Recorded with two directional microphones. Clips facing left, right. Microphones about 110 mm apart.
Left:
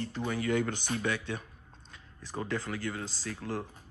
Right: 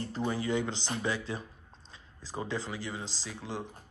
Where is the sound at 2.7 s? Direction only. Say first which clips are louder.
Left 2 dB; 15° right (ahead or behind).